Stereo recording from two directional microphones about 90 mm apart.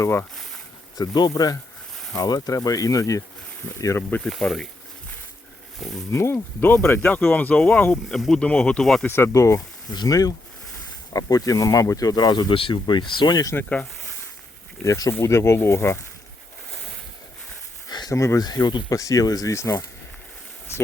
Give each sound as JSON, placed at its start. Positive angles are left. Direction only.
{"t": 0.0, "sound": "speech", "side_deg": 25}
{"t": 0.9, "sound": "speech", "side_deg": 50}
{"t": 4.2, "sound": "speech", "side_deg": 5}
{"t": 6.1, "sound": "speech", "side_deg": 30}
{"t": 8.1, "sound": "speech", "side_deg": 5}
{"t": 9.0, "sound": "speech", "side_deg": 25}
{"t": 9.9, "sound": "speech", "side_deg": 45}
{"t": 12.5, "sound": "speech", "side_deg": 80}
{"t": 13.7, "sound": "speech", "side_deg": 20}
{"t": 14.8, "sound": "speech", "side_deg": 40}
{"t": 15.2, "sound": "speech", "side_deg": 30}
{"t": 17.8, "sound": "a sound", "side_deg": 50}
{"t": 18.1, "sound": "speech", "side_deg": 35}
{"t": 18.4, "sound": "speech", "side_deg": 50}